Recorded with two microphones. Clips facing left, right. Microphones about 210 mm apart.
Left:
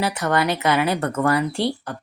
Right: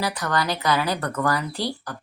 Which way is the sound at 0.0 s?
25° left (ahead or behind).